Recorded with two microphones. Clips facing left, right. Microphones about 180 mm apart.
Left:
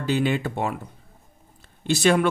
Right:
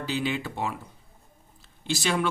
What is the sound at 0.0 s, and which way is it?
Speech, 55° left (ahead or behind).